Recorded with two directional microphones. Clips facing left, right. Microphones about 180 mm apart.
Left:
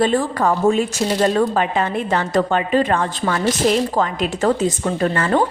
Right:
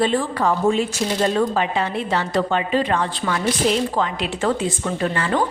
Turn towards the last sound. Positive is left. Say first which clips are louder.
# left 4 dB
turn(degrees=45)  # may be behind; listen again after turning